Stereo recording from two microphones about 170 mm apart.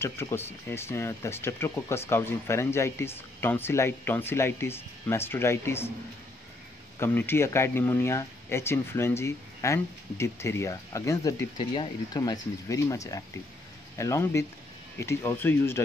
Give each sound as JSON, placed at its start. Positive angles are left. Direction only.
{"t": 0.0, "sound": "speech", "side_deg": 15}
{"t": 7.0, "sound": "speech", "side_deg": 15}